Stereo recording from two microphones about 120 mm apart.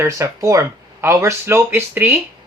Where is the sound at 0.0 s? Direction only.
25° right (ahead or behind).